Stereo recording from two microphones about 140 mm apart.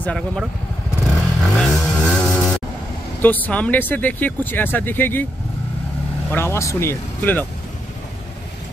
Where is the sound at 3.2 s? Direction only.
10° left (ahead or behind).